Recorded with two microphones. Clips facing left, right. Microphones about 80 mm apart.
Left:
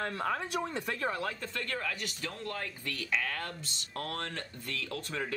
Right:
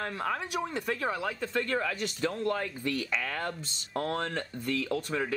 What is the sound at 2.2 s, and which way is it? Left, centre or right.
Speech, right.